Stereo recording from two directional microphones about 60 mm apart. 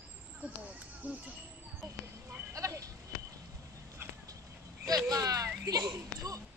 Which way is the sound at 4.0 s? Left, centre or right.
Right.